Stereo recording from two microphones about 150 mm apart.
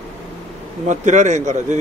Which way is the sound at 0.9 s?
55° right (ahead or behind).